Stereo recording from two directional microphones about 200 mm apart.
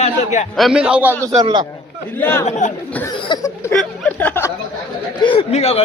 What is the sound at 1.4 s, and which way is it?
Speech, 25° right (ahead or behind).